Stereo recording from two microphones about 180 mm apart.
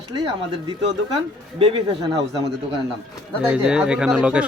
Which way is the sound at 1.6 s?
30° right (ahead or behind).